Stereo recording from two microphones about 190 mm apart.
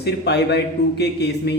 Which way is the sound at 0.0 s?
60° left (ahead or behind).